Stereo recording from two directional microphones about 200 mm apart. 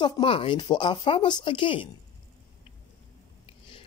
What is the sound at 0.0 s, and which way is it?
Speech, 25° left (ahead or behind).